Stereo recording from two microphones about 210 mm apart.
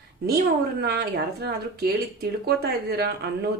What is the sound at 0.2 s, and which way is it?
A woman's voice, 50° right (ahead or behind).